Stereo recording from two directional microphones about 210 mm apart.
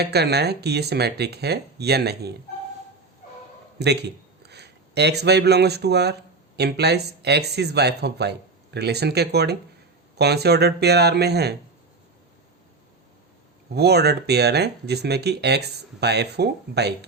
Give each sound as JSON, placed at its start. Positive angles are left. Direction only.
{"t": 0.0, "sound": "speech", "side_deg": -50}
{"t": 3.8, "sound": "a man's voice", "side_deg": -50}
{"t": 13.7, "sound": "speech", "side_deg": -50}